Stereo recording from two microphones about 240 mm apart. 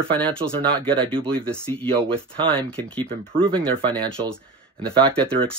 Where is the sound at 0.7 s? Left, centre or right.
Centre.